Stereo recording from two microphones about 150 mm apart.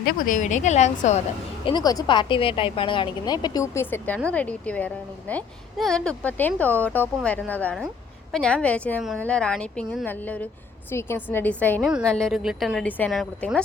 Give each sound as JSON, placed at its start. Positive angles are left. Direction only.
{"t": 0.0, "sound": "a woman's voice", "side_deg": 70}
{"t": 1.6, "sound": "speech", "side_deg": 30}
{"t": 11.8, "sound": "a woman's voice", "side_deg": -5}